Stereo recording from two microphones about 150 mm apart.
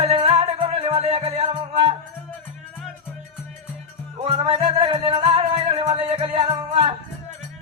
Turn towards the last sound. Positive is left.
turn(degrees=-30)  # may be behind; listen again after turning